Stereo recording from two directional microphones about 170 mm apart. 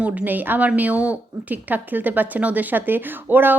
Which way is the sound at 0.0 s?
10° right (ahead or behind).